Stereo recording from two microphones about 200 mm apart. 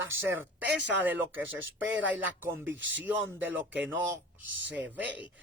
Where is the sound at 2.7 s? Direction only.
65° right (ahead or behind).